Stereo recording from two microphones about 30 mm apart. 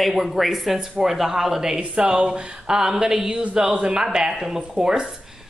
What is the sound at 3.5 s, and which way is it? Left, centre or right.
Speech, right.